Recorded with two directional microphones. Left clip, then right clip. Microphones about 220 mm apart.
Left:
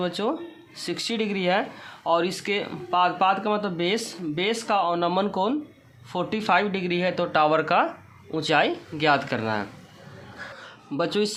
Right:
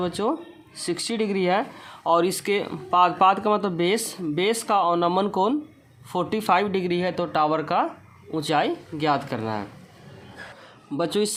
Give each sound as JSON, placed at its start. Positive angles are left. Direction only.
{"t": 0.0, "sound": "speech", "side_deg": -20}
{"t": 10.9, "sound": "speech", "side_deg": -20}